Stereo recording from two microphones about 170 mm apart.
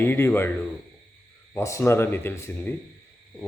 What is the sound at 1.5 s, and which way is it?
A man's voice, 15° left (ahead or behind).